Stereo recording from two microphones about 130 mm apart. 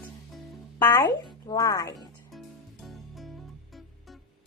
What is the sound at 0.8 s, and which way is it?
Speech, 15° left (ahead or behind).